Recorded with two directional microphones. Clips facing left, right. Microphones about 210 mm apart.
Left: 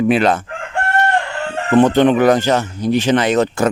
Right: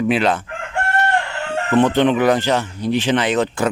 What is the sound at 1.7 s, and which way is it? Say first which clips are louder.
Speech: left 4 dB; 45° left (ahead or behind).